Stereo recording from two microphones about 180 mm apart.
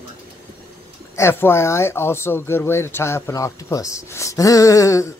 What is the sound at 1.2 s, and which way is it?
Speech, 15° left (ahead or behind).